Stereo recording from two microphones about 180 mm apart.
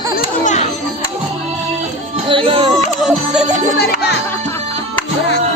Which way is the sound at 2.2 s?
30° right (ahead or behind).